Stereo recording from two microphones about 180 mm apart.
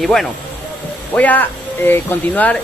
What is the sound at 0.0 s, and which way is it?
Speech, centre (ahead or behind).